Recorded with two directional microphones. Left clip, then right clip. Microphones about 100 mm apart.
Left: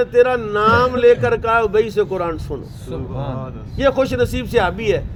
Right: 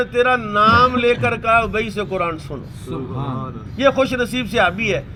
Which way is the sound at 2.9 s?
15° left (ahead or behind).